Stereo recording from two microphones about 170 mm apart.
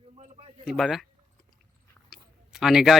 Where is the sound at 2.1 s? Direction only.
Centre (ahead or behind).